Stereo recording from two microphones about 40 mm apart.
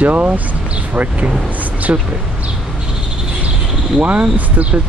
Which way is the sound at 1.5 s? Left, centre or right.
Right.